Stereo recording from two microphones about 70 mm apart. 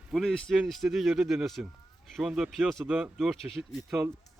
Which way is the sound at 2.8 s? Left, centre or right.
Centre.